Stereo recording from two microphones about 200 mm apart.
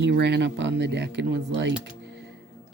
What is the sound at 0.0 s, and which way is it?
Speech, 60° right (ahead or behind).